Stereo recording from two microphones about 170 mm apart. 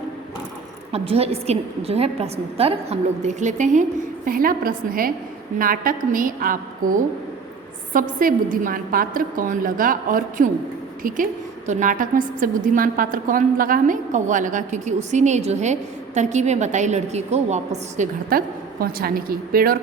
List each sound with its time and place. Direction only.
0.9 s a woman's voice: 35° right (ahead or behind)
4.3 s a woman's voice: 55° right (ahead or behind)
7.9 s a woman's voice: 55° right (ahead or behind)